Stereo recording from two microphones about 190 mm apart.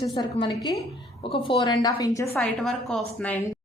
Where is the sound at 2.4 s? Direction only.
Centre (ahead or behind).